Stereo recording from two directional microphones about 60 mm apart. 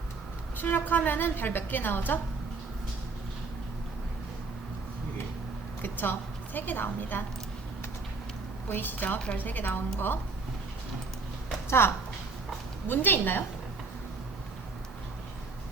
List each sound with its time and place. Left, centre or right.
0.5 s a woman's voice: left
5.8 s a woman's voice: left
8.7 s a woman's voice: left
11.8 s a woman's voice: left